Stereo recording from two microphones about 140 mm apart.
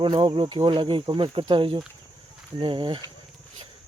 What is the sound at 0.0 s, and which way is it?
Speech, 35° right (ahead or behind).